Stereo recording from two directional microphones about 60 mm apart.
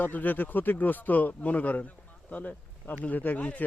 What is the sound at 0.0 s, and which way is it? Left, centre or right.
Speech, left.